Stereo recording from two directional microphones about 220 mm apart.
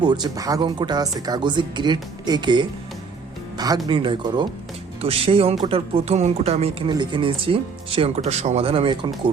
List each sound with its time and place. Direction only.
0.0 s speech: 20° right (ahead or behind)
3.8 s speech: 20° right (ahead or behind)